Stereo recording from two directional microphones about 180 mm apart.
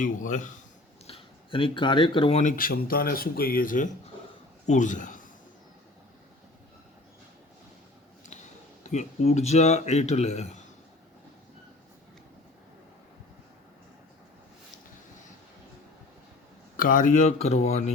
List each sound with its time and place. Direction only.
0.0 s a man's voice: 45° left (ahead or behind)
1.0 s speech: 30° left (ahead or behind)
2.4 s a man's voice: 50° left (ahead or behind)
8.2 s speech: 40° left (ahead or behind)
16.7 s speech: 50° left (ahead or behind)